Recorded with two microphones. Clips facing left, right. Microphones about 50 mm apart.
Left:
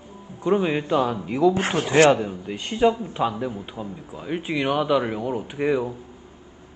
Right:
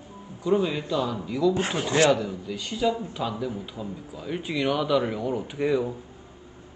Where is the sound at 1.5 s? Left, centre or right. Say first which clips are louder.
Left 3 dB; left.